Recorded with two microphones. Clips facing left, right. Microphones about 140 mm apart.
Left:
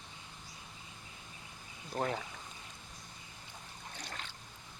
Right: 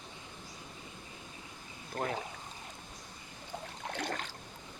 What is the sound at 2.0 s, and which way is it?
Speech, 20° left (ahead or behind).